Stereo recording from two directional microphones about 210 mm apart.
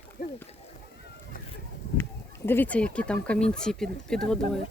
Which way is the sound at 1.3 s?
40° left (ahead or behind).